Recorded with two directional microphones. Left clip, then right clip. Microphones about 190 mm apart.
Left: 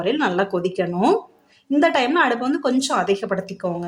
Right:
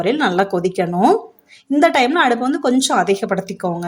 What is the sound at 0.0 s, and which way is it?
A woman's voice, 15° right (ahead or behind).